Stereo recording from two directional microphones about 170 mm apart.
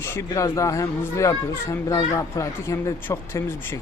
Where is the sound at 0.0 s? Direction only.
15° left (ahead or behind).